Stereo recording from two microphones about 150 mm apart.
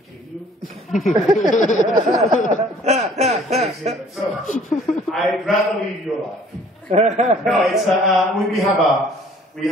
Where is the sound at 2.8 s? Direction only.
50° right (ahead or behind).